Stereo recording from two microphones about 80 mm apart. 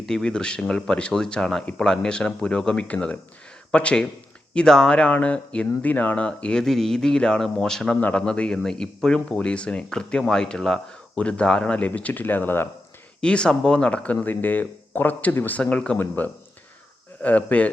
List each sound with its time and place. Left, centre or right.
0.0 s speech: centre; by 12.6 s left
13.2 s speech: centre